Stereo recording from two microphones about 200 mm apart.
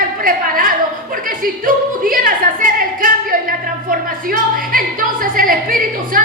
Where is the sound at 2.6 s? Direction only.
45° right (ahead or behind).